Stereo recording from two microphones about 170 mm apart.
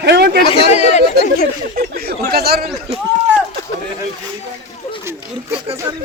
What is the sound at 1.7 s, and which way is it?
Speech, 65° right (ahead or behind).